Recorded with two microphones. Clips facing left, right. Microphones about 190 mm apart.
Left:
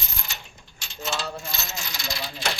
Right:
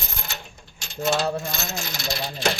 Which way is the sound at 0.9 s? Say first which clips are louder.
Right 8 dB; 50° right (ahead or behind).